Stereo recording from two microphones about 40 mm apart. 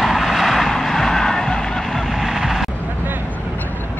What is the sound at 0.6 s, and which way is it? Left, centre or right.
Vehicle, centre.